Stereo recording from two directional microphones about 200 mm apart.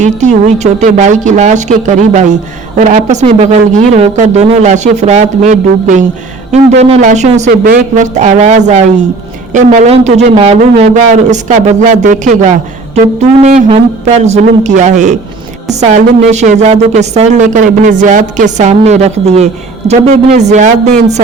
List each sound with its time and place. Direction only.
0.0 s a woman's voice: 35° right (ahead or behind)
7.5 s a woman's voice: 45° right (ahead or behind)